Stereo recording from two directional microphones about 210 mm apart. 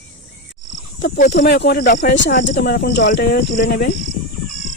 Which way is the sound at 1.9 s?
60° left (ahead or behind).